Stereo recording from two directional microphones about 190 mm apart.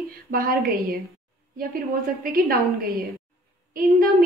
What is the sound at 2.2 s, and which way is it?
A woman's voice, 50° right (ahead or behind).